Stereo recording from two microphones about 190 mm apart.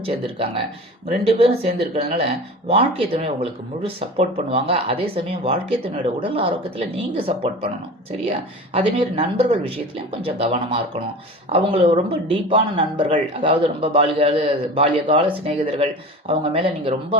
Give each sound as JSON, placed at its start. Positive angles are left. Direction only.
{"t": 0.3, "sound": "speech", "side_deg": -30}